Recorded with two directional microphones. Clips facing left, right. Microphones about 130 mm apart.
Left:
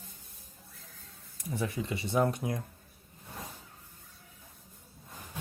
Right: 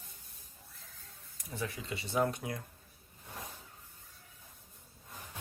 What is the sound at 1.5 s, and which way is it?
Speech, 15° left (ahead or behind).